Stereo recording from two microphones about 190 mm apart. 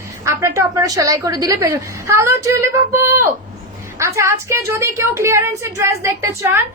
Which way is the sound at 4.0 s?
15° right (ahead or behind).